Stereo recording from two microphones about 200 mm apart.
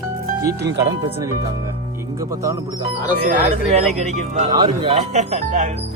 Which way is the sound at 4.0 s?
35° right (ahead or behind).